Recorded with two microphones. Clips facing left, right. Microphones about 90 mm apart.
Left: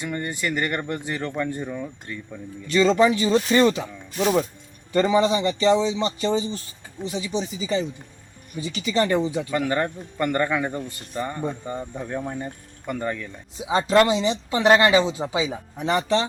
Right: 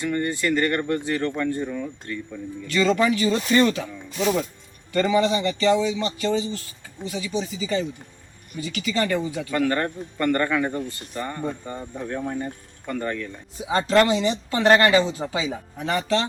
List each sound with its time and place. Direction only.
0.0 s speech: 15° left (ahead or behind)